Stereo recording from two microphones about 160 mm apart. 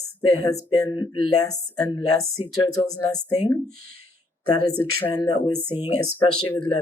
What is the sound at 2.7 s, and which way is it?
Speech, 25° left (ahead or behind).